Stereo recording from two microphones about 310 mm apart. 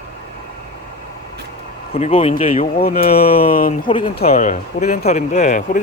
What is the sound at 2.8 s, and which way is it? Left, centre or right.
Speech, left.